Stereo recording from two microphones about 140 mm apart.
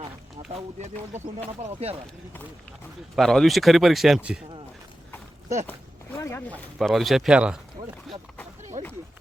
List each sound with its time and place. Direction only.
1.6 s speech: 45° right (ahead or behind)
3.2 s speech: centre (ahead or behind)
6.1 s speech: 20° left (ahead or behind)
6.7 s speech: centre (ahead or behind)
8.8 s run: 60° right (ahead or behind)